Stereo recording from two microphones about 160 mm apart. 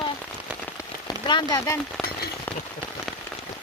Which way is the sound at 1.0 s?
25° left (ahead or behind).